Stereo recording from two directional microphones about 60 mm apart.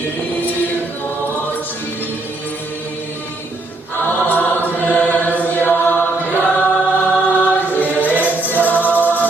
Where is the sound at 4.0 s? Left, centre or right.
Left.